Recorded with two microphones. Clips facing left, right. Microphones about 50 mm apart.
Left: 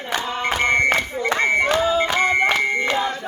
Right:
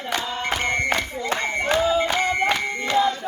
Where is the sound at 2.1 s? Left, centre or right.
Left.